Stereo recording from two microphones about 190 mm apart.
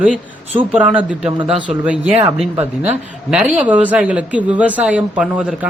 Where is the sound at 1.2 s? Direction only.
30° right (ahead or behind).